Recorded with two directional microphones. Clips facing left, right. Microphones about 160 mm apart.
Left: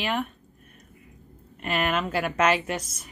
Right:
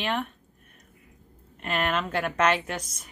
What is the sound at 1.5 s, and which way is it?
Speech, 5° left (ahead or behind).